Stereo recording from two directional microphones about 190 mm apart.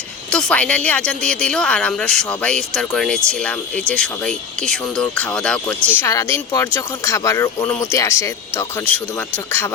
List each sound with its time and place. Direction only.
0.3 s a woman's voice: 5° left (ahead or behind)